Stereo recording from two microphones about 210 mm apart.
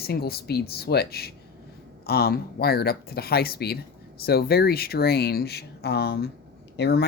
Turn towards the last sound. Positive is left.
turn(degrees=50)  # may be behind; listen again after turning